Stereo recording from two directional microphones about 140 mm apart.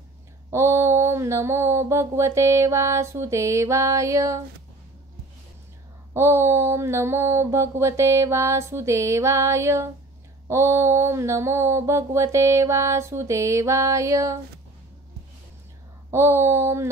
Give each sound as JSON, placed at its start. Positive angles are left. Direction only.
{"t": 0.5, "sound": "mantra", "side_deg": -20}
{"t": 6.1, "sound": "mantra", "side_deg": -20}
{"t": 16.1, "sound": "mantra", "side_deg": -20}